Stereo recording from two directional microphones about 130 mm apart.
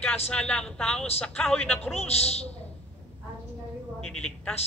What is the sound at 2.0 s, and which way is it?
Speech, 55° left (ahead or behind).